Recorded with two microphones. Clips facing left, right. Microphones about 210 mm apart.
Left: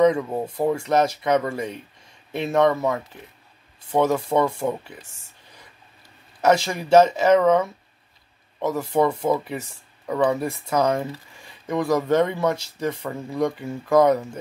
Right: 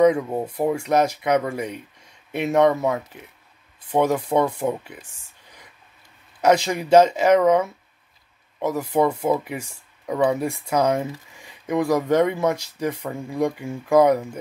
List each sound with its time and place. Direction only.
0.0 s speech: 10° right (ahead or behind)
6.4 s speech: 15° right (ahead or behind)